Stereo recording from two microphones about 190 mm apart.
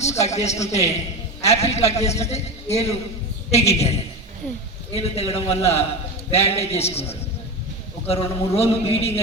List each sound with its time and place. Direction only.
0.0 s a man's voice: 35° left (ahead or behind)